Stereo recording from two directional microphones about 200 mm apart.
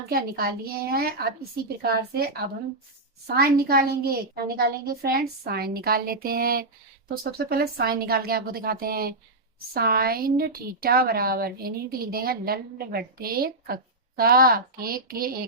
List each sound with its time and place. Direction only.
0.1 s a woman's voice: 50° right (ahead or behind)